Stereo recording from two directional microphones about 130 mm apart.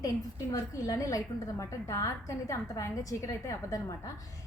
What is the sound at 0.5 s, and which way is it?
A woman's voice, 25° left (ahead or behind).